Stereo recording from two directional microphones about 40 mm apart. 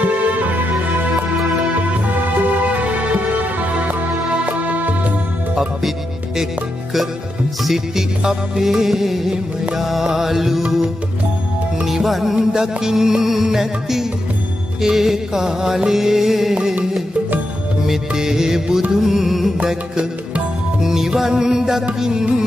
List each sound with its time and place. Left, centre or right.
0.0 s music: right
2.6 s music: right
4.5 s music: right
7.6 s music: centre
11.8 s music: centre
17.8 s music: centre
19.6 s music: right
20.8 s music: centre